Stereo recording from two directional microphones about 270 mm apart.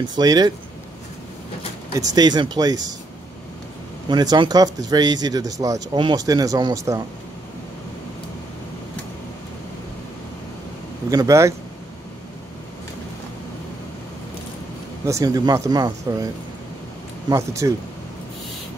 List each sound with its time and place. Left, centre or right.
0.1 s speech: centre
2.1 s speech: centre
4.1 s speech: centre
11.1 s speech: centre
15.0 s speech: centre
17.3 s speech: centre